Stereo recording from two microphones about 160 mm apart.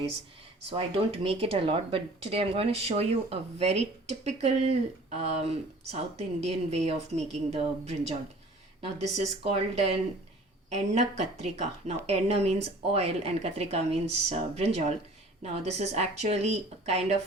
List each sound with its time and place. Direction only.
0.7 s a woman's voice: 35° right (ahead or behind)